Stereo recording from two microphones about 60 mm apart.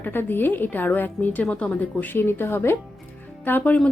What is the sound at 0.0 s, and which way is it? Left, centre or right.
A woman's voice, left.